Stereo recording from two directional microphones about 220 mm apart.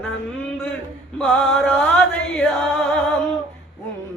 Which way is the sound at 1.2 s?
Centre (ahead or behind).